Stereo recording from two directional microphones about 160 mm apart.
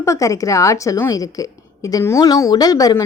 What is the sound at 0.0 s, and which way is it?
A woman's voice, 20° left (ahead or behind).